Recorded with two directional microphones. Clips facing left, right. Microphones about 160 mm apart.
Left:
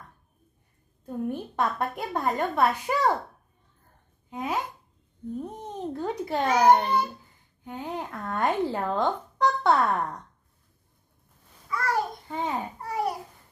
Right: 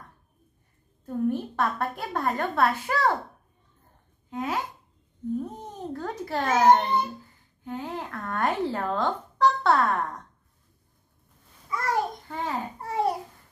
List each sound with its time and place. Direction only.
1.0 s a woman's voice: 15° left (ahead or behind)
4.3 s speech: 15° left (ahead or behind)
5.4 s babbling: 20° left (ahead or behind)
6.6 s a woman's voice: 15° left (ahead or behind)
11.7 s babbling: 20° right (ahead or behind)
12.3 s speech: 20° left (ahead or behind)
12.8 s babbling: 25° right (ahead or behind)